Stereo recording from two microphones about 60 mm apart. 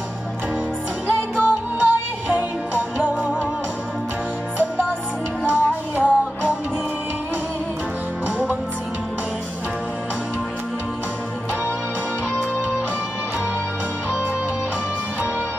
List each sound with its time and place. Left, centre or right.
1.4 s music: centre
5.5 s music: right